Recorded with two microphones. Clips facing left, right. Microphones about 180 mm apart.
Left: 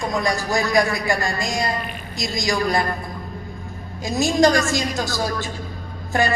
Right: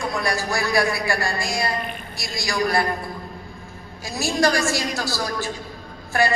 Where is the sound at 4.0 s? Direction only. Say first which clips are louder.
Left 4 dB; 20° left (ahead or behind).